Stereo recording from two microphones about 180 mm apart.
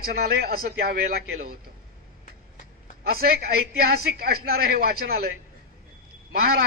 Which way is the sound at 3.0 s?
60° right (ahead or behind).